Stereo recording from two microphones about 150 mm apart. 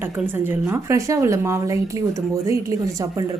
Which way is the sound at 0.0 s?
15° right (ahead or behind).